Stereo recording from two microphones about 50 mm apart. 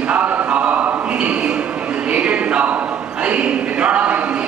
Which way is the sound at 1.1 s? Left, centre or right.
Right.